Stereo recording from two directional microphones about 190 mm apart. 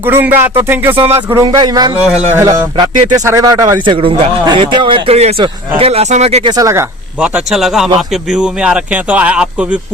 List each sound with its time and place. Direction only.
0.0 s speech: 10° right (ahead or behind)
0.9 s speech: 30° right (ahead or behind)
1.3 s speech: 20° right (ahead or behind)
6.5 s a man's voice: 15° right (ahead or behind)